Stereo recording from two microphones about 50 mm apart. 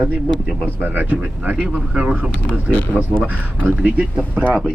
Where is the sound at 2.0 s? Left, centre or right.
Right.